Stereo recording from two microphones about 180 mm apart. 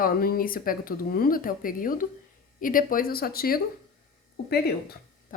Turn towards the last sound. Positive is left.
turn(degrees=60)  # may be behind; listen again after turning